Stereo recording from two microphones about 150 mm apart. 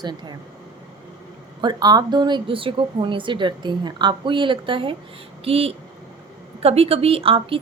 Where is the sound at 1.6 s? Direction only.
25° right (ahead or behind).